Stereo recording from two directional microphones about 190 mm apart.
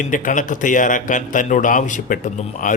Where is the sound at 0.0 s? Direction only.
45° left (ahead or behind).